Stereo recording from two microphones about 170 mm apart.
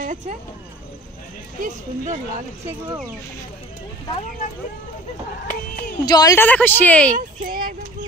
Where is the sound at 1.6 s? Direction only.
45° right (ahead or behind).